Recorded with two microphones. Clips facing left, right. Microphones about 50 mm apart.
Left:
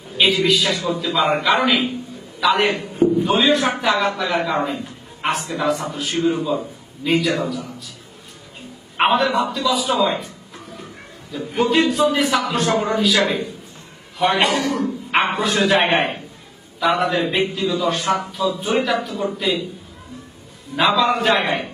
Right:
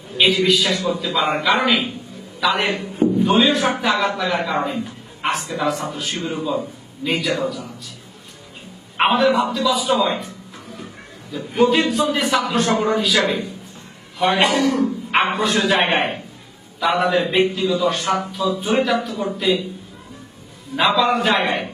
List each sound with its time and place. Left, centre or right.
0.2 s a man's voice: centre
9.0 s a man's voice: centre
11.3 s a man's voice: centre
20.7 s a man's voice: centre